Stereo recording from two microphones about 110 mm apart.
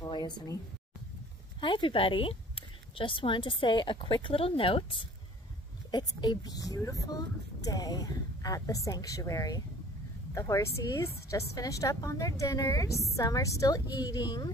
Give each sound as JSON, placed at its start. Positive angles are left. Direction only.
{"t": 0.1, "sound": "a sound", "side_deg": 35}
{"t": 1.6, "sound": "speech", "side_deg": 50}
{"t": 5.9, "sound": "a woman's voice", "side_deg": 40}